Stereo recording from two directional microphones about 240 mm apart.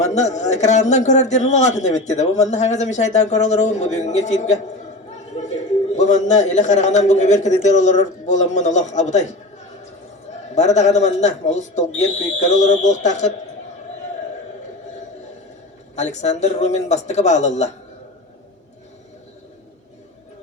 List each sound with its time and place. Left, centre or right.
0.0 s a man's voice: left
6.0 s a man's voice: left
10.5 s a man's voice: left
16.0 s a man's voice: left